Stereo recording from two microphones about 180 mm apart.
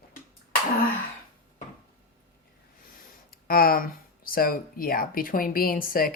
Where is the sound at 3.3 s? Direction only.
55° left (ahead or behind).